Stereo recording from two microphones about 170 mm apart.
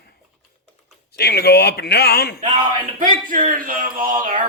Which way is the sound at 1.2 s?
70° left (ahead or behind).